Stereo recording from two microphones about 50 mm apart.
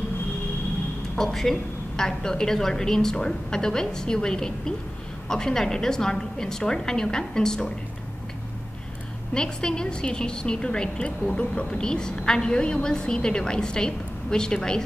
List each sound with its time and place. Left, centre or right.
1.1 s a woman's voice: centre
9.3 s a woman's voice: centre